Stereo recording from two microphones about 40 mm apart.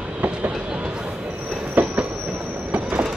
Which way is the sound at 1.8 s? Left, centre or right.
Right.